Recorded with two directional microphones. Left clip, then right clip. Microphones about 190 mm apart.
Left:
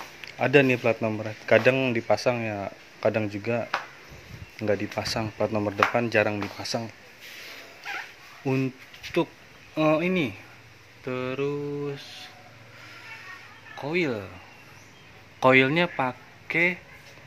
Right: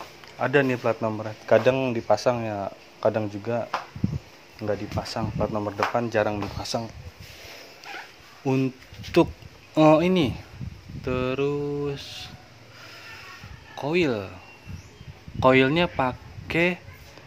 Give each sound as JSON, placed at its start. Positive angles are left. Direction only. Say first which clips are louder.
{"t": 0.4, "sound": "speech", "louder": "left 2 dB", "side_deg": 30}
{"t": 1.0, "sound": "speech", "louder": "right 1 dB", "side_deg": 15}
{"t": 5.9, "sound": "speech", "louder": "even", "side_deg": 15}
{"t": 8.5, "sound": "speech", "louder": "right 2 dB", "side_deg": -5}
{"t": 9.1, "sound": "speech", "louder": "right 6 dB", "side_deg": -15}
{"t": 13.7, "sound": "speech", "louder": "right 3 dB", "side_deg": -10}
{"t": 15.4, "sound": "speech", "louder": "even", "side_deg": 0}